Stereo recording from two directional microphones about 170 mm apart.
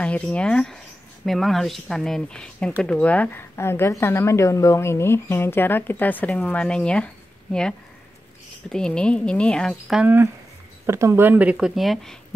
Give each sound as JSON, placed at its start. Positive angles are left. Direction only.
{"t": 0.0, "sound": "speech", "side_deg": 5}
{"t": 8.6, "sound": "speech", "side_deg": 5}